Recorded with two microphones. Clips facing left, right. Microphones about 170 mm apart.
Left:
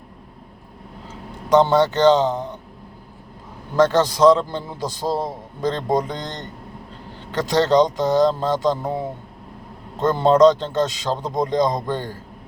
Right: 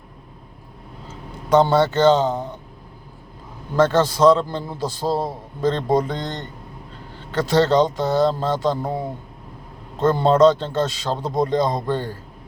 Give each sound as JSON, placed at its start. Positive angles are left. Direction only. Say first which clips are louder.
{"t": 1.0, "sound": "a man's voice", "louder": "left 1 dB", "side_deg": 15}
{"t": 2.2, "sound": "speech", "louder": "left 1 dB", "side_deg": -10}
{"t": 3.8, "sound": "speech", "louder": "left 1 dB", "side_deg": 15}
{"t": 10.0, "sound": "speech", "louder": "left 1 dB", "side_deg": 15}